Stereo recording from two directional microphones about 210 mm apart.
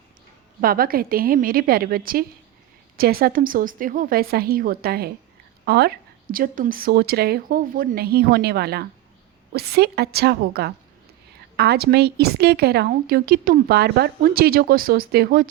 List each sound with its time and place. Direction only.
0.6 s a woman's voice: 45° right (ahead or behind)